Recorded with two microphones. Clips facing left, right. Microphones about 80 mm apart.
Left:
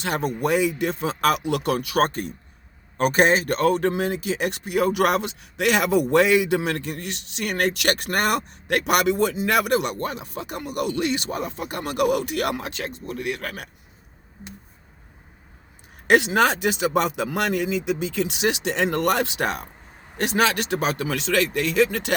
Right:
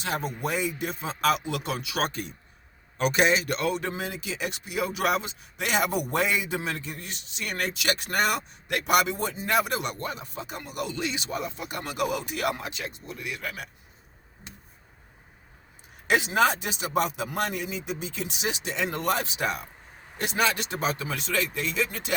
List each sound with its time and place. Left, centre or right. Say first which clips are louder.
0.0 s speech: left 6 dB; left
16.0 s speech: left 5 dB; left